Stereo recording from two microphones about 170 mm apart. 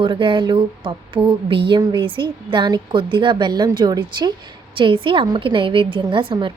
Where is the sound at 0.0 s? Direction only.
30° right (ahead or behind).